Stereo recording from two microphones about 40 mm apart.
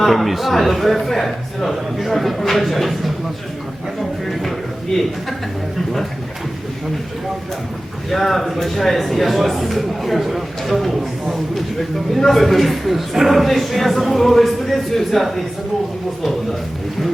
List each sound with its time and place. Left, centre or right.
0.0 s a man's voice: centre
4.9 s a man's voice: centre
8.1 s a man's voice: centre